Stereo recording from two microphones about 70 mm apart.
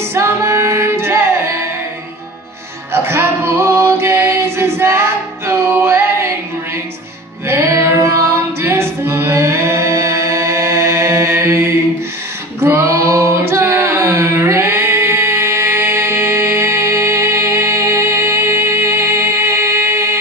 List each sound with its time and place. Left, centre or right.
0.1 s music: right
2.9 s music: right
7.4 s a capella: right
12.5 s female singing: right